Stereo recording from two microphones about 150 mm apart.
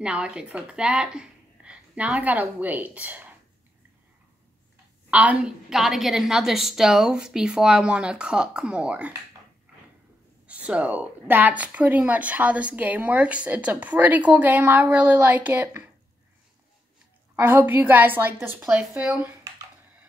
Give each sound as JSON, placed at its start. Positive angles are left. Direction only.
{"t": 0.0, "sound": "a woman's voice", "side_deg": -5}
{"t": 5.1, "sound": "a woman's voice", "side_deg": -10}
{"t": 9.7, "sound": "cupboard open or close", "side_deg": -10}
{"t": 10.4, "sound": "a woman's voice", "side_deg": -10}
{"t": 17.4, "sound": "a woman's voice", "side_deg": -15}